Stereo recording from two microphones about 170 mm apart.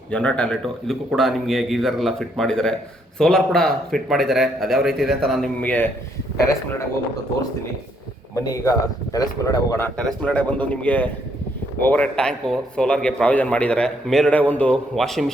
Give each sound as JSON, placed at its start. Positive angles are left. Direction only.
{"t": 0.1, "sound": "a man's voice", "side_deg": 5}
{"t": 8.4, "sound": "speech", "side_deg": 20}
{"t": 10.0, "sound": "a man's voice", "side_deg": 5}